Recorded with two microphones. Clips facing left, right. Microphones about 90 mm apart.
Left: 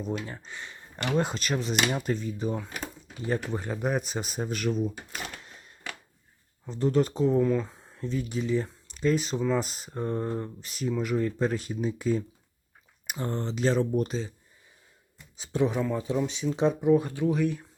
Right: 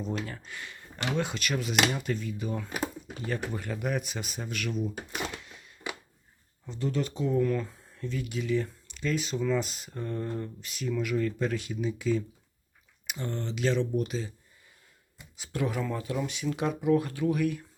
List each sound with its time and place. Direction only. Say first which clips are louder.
0.3 s speech: left 1 dB; 25° left (ahead or behind)
0.9 s speech: left 3 dB; 40° left (ahead or behind)
5.4 s a sound: even; 35° left (ahead or behind)
5.9 s a sound: right 3 dB; 15° right (ahead or behind)
6.7 s speech: left 6 dB; 40° left (ahead or behind)
7.3 s speech: left 3 dB; 20° left (ahead or behind)
7.9 s speech: left 3 dB; 35° left (ahead or behind)
15.4 s speech: left 5 dB; 20° left (ahead or behind)